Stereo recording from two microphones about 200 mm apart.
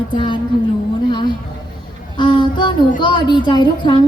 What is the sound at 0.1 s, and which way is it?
Speech, 25° left (ahead or behind).